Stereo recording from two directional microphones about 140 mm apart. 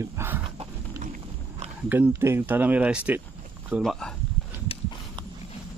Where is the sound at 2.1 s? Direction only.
20° right (ahead or behind).